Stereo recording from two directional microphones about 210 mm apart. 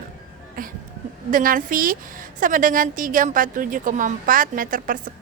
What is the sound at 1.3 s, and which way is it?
A woman's voice, 40° right (ahead or behind).